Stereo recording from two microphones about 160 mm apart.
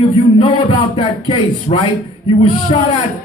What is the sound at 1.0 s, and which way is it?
Speech, 35° left (ahead or behind).